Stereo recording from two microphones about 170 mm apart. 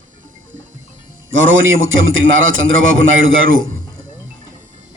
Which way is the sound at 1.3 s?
90° right.